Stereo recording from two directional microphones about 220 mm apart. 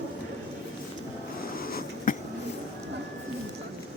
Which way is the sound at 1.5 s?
40° left (ahead or behind).